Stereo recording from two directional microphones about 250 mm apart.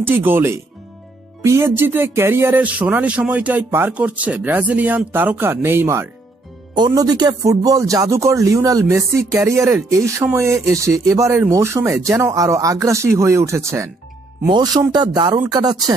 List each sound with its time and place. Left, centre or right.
0.0 s speech: centre